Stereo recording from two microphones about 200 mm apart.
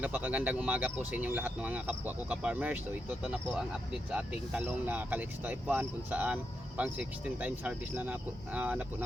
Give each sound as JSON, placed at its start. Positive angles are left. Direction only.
{"t": 0.0, "sound": "speech", "side_deg": -10}